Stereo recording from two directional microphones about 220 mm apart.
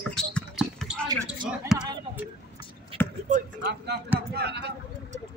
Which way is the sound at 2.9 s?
25° right (ahead or behind).